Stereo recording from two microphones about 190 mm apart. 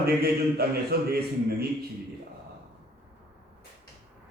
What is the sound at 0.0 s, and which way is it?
A man's voice, 55° right (ahead or behind).